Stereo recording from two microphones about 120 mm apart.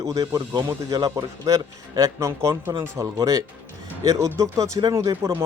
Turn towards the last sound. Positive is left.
turn(degrees=-25)  # may be behind; listen again after turning